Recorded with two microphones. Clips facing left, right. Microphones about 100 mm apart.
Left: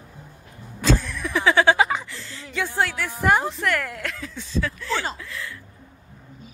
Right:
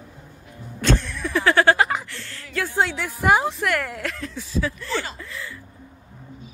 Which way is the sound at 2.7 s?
15° right (ahead or behind).